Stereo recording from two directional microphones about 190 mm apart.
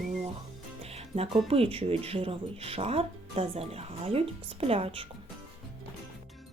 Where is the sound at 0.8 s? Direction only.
30° right (ahead or behind).